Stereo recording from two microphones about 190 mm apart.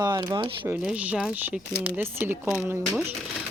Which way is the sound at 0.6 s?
5° right (ahead or behind).